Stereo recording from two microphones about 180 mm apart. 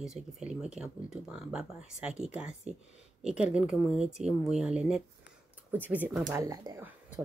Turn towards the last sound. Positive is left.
turn(degrees=-10)  # may be behind; listen again after turning